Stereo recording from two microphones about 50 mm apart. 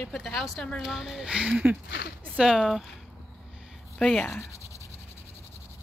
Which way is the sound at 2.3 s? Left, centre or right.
Centre.